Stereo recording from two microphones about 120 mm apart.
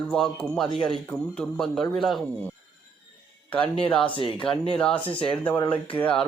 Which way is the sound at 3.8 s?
10° left (ahead or behind).